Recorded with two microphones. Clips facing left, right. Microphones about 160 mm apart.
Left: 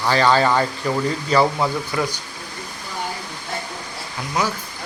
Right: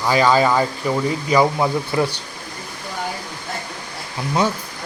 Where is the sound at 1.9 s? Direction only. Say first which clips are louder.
Right 5 dB; 25° right (ahead or behind).